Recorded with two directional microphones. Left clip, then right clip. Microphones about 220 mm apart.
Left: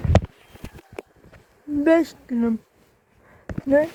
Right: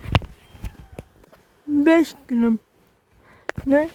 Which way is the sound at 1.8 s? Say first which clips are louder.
Right 1 dB; 35° right (ahead or behind).